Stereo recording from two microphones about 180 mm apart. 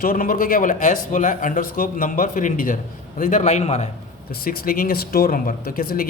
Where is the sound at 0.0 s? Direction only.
50° left (ahead or behind).